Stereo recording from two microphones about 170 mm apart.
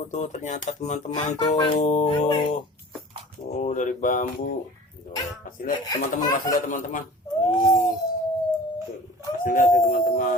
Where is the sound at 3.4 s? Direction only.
45° left (ahead or behind).